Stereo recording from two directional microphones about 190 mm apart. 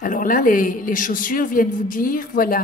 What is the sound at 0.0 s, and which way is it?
A man's voice, 45° left (ahead or behind).